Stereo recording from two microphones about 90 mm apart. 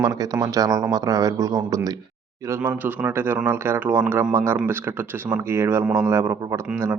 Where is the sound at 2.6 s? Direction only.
20° right (ahead or behind).